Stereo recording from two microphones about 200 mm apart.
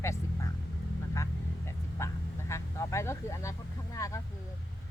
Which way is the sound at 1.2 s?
15° left (ahead or behind).